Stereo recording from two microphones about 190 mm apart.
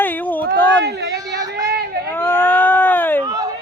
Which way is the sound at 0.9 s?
65° right (ahead or behind).